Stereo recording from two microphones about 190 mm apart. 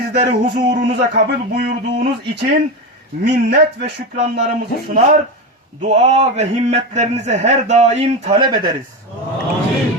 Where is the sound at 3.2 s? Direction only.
60° right (ahead or behind).